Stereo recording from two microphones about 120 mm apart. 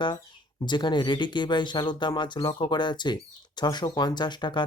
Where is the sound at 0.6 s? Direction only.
40° left (ahead or behind).